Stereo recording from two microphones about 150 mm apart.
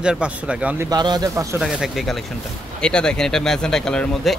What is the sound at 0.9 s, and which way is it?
Speech, 25° right (ahead or behind).